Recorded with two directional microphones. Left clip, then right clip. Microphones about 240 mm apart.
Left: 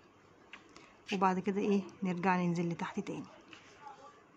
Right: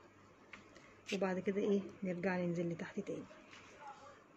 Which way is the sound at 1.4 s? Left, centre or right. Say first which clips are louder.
Left 2 dB; left.